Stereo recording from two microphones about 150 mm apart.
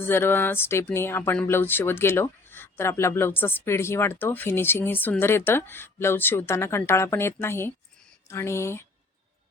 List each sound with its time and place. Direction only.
0.0 s speech: 15° left (ahead or behind)